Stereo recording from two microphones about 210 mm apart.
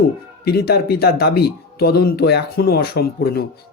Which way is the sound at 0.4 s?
50° left (ahead or behind).